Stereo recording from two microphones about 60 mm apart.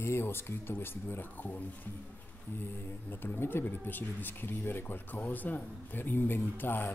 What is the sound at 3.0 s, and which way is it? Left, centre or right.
Speech, left.